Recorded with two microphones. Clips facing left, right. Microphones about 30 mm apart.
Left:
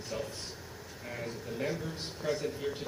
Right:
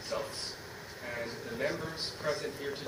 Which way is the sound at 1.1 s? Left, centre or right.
Centre.